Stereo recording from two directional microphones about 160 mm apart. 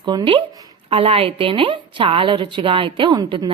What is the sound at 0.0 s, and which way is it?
A woman's voice, 30° right (ahead or behind).